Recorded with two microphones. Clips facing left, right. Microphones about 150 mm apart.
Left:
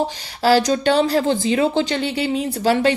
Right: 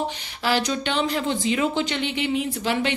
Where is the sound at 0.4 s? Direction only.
35° left (ahead or behind).